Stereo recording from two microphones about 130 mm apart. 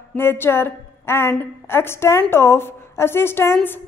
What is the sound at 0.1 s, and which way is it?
A woman's voice, 15° left (ahead or behind).